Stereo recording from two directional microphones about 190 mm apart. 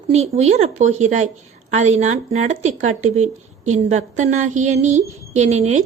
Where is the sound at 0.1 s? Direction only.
35° right (ahead or behind).